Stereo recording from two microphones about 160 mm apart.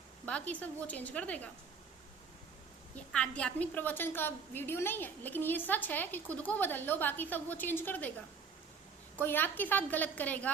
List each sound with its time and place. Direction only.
0.3 s a woman's voice: 10° left (ahead or behind)
3.1 s a woman's voice: 5° left (ahead or behind)
9.1 s a woman's voice: 10° left (ahead or behind)